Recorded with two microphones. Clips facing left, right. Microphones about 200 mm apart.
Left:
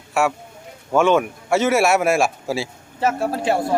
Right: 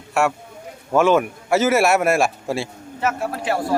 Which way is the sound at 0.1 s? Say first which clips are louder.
Even; centre (ahead or behind).